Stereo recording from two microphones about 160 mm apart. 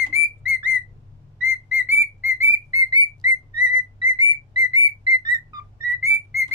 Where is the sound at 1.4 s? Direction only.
15° right (ahead or behind).